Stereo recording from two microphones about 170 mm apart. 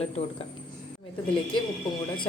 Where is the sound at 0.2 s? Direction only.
40° left (ahead or behind).